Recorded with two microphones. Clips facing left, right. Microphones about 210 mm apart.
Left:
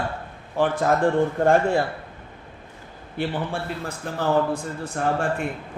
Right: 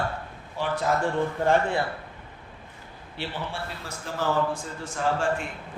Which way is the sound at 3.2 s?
50° left (ahead or behind).